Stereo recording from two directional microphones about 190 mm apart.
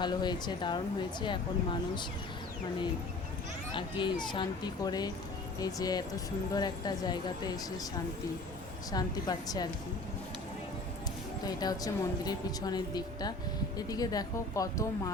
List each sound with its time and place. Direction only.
0.0 s speech: 20° left (ahead or behind)
3.7 s speech: 25° left (ahead or behind)
8.9 s speech: 20° left (ahead or behind)
11.4 s speech: 20° left (ahead or behind)